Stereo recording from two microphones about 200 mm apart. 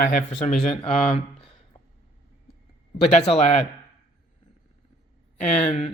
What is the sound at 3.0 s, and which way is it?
Speech, 30° left (ahead or behind).